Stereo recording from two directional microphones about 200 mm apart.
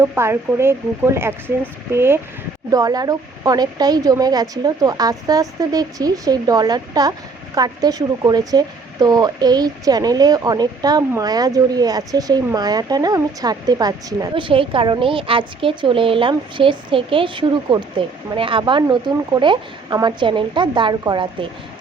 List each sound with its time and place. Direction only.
0.0 s speech: 15° right (ahead or behind)